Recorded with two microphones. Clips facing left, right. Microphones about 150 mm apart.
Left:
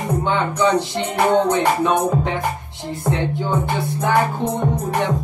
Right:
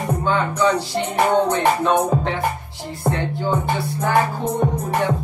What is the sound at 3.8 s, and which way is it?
Music, 20° left (ahead or behind).